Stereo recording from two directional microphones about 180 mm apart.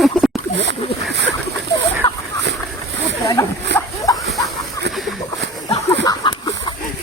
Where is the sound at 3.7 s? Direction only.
75° right (ahead or behind).